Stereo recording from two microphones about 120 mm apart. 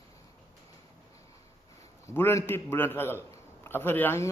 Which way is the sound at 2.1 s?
20° left (ahead or behind).